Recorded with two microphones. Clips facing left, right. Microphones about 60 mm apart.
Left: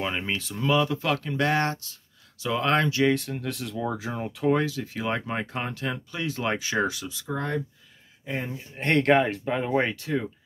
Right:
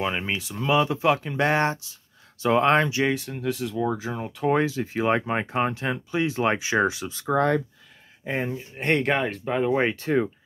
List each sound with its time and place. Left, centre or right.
0.0 s speech: centre
0.7 s speech: right
2.4 s speech: right
3.1 s speech: centre
4.5 s speech: right
7.2 s speech: right
8.5 s speech: centre
9.9 s speech: right